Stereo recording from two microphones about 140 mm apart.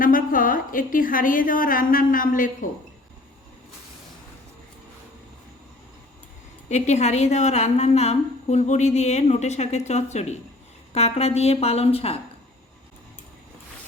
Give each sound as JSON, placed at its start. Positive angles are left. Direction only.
{"t": 0.0, "sound": "a woman's voice", "side_deg": 90}
{"t": 6.7, "sound": "a woman's voice", "side_deg": 55}